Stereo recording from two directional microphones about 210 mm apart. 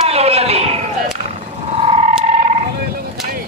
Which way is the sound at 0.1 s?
30° right (ahead or behind).